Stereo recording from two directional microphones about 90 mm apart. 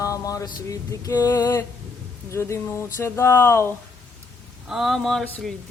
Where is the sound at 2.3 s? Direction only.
30° left (ahead or behind).